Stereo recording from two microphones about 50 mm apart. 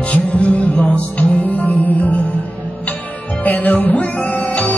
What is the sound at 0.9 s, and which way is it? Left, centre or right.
Music, left.